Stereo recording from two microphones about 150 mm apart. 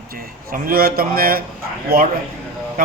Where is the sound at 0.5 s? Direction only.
75° right (ahead or behind).